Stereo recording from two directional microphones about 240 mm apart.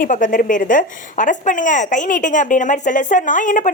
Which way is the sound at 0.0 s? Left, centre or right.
Left.